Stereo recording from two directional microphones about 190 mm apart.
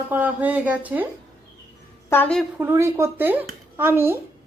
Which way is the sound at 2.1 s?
5° left (ahead or behind).